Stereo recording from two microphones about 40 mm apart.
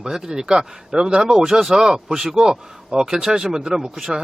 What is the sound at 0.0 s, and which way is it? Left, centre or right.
Speech, centre.